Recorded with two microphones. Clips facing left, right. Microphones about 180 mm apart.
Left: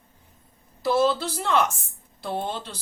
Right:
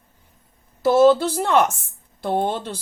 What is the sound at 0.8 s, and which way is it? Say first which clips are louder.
Speech: right 8 dB; 50° right (ahead or behind).